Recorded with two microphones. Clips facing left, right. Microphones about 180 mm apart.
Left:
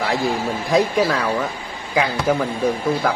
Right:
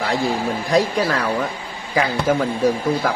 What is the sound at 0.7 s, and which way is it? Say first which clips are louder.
Speech: left 1 dB; centre (ahead or behind).